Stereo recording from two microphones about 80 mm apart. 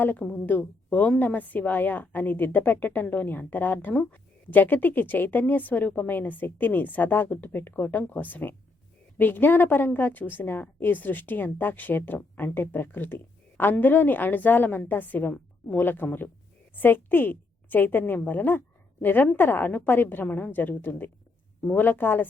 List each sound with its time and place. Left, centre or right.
0.0 s a woman's voice: left